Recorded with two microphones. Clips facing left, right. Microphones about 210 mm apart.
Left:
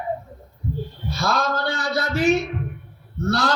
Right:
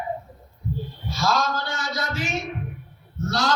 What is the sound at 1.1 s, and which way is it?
A man's voice, 60° left (ahead or behind).